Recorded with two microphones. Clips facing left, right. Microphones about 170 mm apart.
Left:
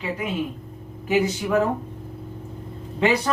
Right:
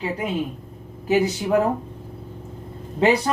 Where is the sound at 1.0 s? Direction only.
35° right (ahead or behind).